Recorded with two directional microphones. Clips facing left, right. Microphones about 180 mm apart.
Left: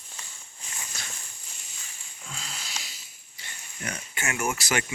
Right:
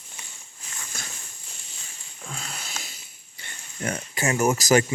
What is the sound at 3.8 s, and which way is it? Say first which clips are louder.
Speech: right 7 dB; 40° right (ahead or behind).